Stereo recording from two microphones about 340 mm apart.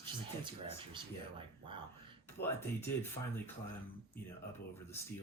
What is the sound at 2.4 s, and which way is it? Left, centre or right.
Speech, left.